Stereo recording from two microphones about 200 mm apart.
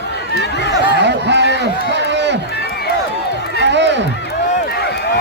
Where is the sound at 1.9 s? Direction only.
60° right (ahead or behind).